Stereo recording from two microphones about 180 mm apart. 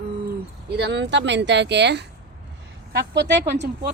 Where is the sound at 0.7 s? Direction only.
75° right (ahead or behind).